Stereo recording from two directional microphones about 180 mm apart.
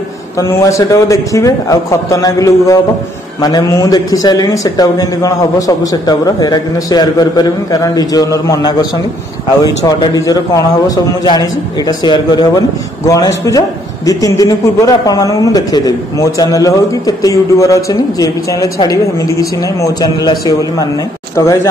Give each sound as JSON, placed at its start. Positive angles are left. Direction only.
{"t": 0.4, "sound": "a man's voice", "side_deg": 15}
{"t": 9.8, "sound": "a man's voice", "side_deg": 20}